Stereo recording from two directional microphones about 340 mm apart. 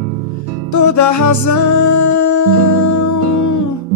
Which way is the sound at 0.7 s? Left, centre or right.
Left.